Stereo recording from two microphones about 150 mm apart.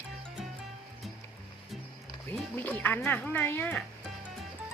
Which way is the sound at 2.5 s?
10° left (ahead or behind).